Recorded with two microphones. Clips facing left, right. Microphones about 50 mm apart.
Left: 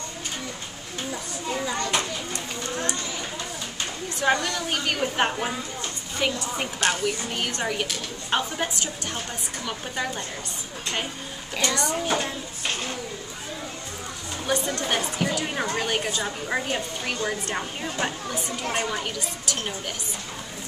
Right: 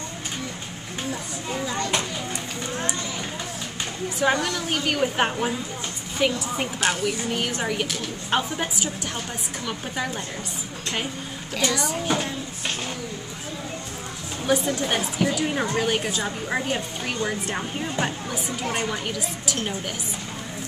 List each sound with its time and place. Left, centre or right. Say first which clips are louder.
1.8 s children playing: right 2 dB; centre
2.3 s a sound: even; centre
4.2 s a woman's voice: right 1 dB; centre
11.6 s a woman's voice: right 1 dB; centre
14.4 s a woman's voice: right 4 dB; centre